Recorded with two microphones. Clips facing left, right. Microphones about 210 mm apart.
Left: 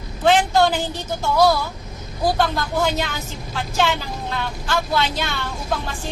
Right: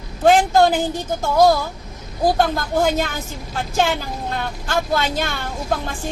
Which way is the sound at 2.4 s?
50° right (ahead or behind).